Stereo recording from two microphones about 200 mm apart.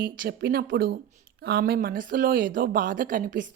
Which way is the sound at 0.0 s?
50° right (ahead or behind).